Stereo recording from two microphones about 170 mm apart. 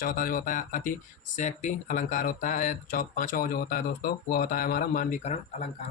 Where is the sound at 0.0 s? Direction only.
55° left (ahead or behind).